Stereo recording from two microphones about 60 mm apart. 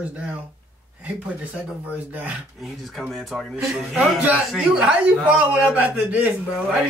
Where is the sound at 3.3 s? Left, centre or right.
Centre.